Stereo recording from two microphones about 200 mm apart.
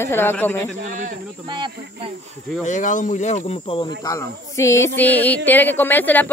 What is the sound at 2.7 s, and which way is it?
Speech, 40° left (ahead or behind).